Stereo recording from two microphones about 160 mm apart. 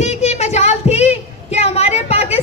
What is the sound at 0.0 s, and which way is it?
Child singing, 45° left (ahead or behind).